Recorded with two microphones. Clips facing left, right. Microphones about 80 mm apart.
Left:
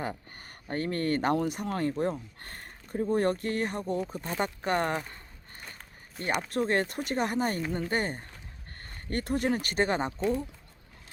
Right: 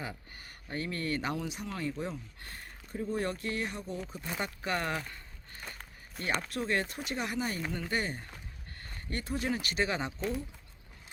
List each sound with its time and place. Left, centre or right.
0.0 s speech: left
6.5 s speech: left